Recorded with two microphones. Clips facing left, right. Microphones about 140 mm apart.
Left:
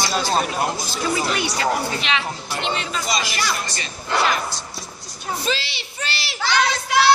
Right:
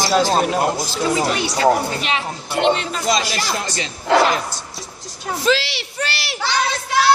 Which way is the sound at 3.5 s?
90° right.